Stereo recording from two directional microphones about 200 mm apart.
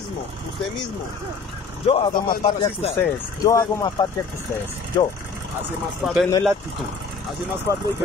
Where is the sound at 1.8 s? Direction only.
25° left (ahead or behind).